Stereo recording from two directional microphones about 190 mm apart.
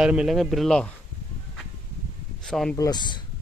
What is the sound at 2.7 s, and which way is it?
Speech, 20° left (ahead or behind).